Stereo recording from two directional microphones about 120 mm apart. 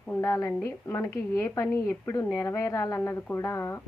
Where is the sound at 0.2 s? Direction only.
25° left (ahead or behind).